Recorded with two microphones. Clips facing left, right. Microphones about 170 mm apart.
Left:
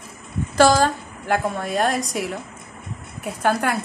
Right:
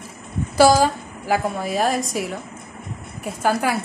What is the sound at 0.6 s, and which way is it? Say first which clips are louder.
A woman's voice: right 1 dB; 10° right (ahead or behind).